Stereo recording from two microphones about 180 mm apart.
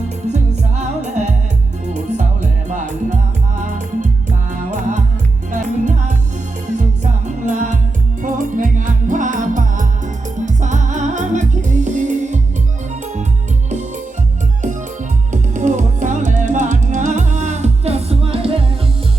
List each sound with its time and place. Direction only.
0.3 s music: 40° right (ahead or behind)
5.5 s music: 45° right (ahead or behind)
13.7 s music: 40° right (ahead or behind)
15.3 s music: 45° right (ahead or behind)